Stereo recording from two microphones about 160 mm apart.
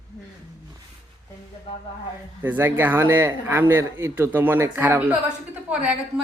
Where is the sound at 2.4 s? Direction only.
10° right (ahead or behind).